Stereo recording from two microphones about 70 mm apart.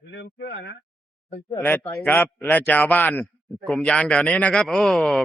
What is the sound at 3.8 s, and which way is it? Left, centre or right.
Speech, centre.